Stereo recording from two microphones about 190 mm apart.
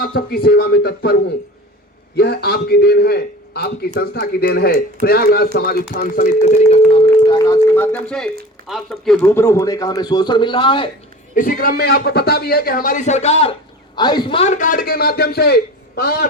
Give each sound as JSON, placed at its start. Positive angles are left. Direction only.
{"t": 0.0, "sound": "a man's voice", "side_deg": 55}
{"t": 2.1, "sound": "a man's voice", "side_deg": 55}
{"t": 6.9, "sound": "a man's voice", "side_deg": 25}
{"t": 8.6, "sound": "speech", "side_deg": 0}
{"t": 9.3, "sound": "a man's voice", "side_deg": 15}
{"t": 11.3, "sound": "a man's voice", "side_deg": 50}